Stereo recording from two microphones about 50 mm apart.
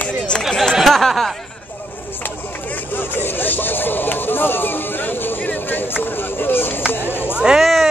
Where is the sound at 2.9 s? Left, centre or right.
Left.